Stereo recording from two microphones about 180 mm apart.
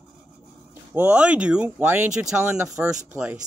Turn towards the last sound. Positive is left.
turn(degrees=-10)  # may be behind; listen again after turning